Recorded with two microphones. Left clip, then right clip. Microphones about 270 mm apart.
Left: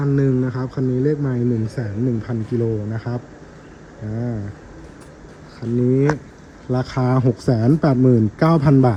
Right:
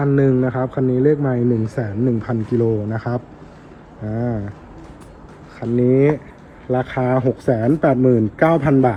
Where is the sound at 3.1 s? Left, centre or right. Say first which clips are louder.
Right 6 dB; right.